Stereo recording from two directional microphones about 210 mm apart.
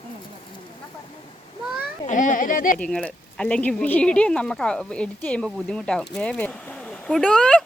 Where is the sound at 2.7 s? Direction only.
5° left (ahead or behind).